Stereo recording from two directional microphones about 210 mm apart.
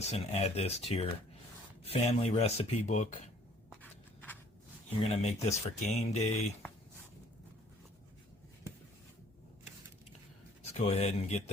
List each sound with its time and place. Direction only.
0.0 s speech: 30° left (ahead or behind)
5.0 s speech: 30° left (ahead or behind)
10.6 s speech: 30° left (ahead or behind)